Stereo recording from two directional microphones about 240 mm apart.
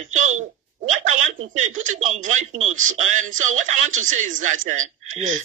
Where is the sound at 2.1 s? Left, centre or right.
Right.